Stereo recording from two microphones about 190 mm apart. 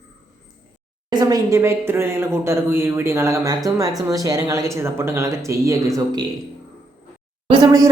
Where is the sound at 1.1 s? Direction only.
20° right (ahead or behind).